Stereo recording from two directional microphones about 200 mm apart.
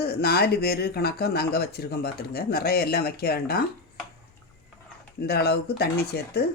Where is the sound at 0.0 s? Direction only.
55° left (ahead or behind).